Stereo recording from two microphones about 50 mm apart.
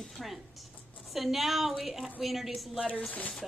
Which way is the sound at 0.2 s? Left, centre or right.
Centre.